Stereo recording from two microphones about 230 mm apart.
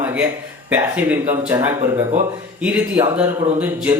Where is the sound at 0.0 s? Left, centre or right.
Centre.